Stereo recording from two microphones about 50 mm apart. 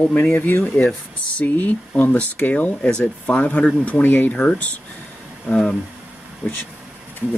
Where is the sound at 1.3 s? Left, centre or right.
Left.